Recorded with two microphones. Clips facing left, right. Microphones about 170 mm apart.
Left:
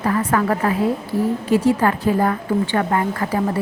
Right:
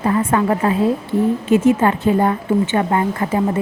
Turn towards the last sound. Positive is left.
turn(degrees=-25)  # may be behind; listen again after turning